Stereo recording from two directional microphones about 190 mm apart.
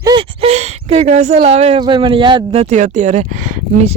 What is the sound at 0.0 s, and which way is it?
Speech, 25° right (ahead or behind).